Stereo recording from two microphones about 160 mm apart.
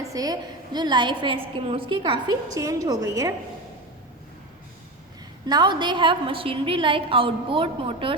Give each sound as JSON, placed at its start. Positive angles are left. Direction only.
{"t": 0.1, "sound": "a woman's voice", "side_deg": -25}
{"t": 5.5, "sound": "a woman's voice", "side_deg": -25}